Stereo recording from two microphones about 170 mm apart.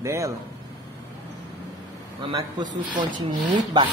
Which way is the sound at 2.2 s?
30° right (ahead or behind).